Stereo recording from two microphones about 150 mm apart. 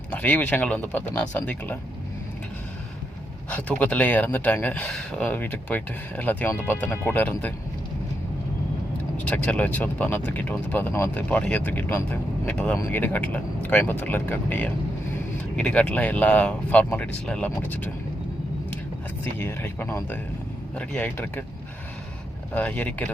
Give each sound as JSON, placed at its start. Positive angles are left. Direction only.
{"t": 0.1, "sound": "speech", "side_deg": 10}
{"t": 3.5, "sound": "speech", "side_deg": 10}
{"t": 9.1, "sound": "speech", "side_deg": 10}
{"t": 19.2, "sound": "speech", "side_deg": 15}
{"t": 22.5, "sound": "speech", "side_deg": 10}